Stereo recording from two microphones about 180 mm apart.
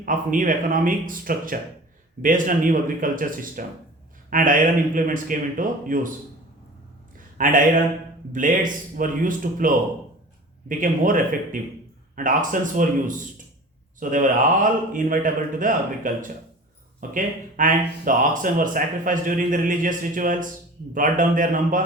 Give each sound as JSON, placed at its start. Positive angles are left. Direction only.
{"t": 0.0, "sound": "a man's voice", "side_deg": -50}
{"t": 7.3, "sound": "speech", "side_deg": -50}